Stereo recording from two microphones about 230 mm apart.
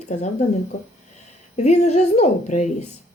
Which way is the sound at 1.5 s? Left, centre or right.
Left.